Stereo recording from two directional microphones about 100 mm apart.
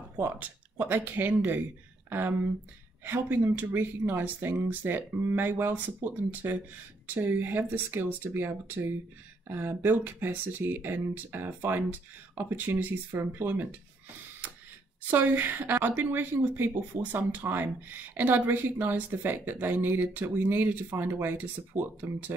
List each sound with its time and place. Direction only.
0.2 s a woman's voice: 20° right (ahead or behind)
15.0 s a woman's voice: 20° right (ahead or behind)